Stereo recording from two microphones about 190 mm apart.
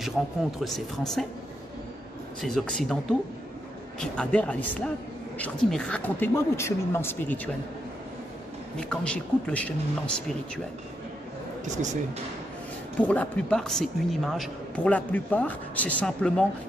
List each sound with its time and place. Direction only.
0.6 s speech: centre (ahead or behind)
2.4 s speech: 5° left (ahead or behind)
4.0 s a man's voice: 5° left (ahead or behind)
8.7 s speech: 5° left (ahead or behind)
11.6 s speech: 40° right (ahead or behind)
13.1 s a man's voice: 5° left (ahead or behind)